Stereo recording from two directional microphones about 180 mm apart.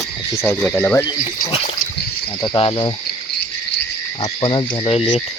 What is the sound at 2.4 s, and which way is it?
Cricket, 25° left (ahead or behind).